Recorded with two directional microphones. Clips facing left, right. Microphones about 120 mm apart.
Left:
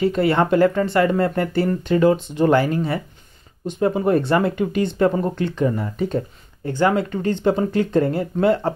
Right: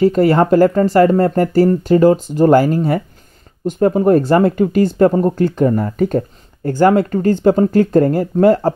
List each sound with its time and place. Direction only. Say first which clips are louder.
0.0 s speech: right 6 dB; 40° right (ahead or behind)